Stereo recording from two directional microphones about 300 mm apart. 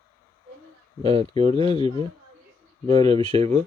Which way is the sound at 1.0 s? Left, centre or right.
Centre.